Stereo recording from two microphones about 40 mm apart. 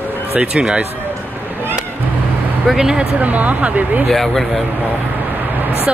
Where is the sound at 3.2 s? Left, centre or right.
Right.